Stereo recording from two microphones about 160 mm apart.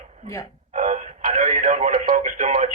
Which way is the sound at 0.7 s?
50° right (ahead or behind).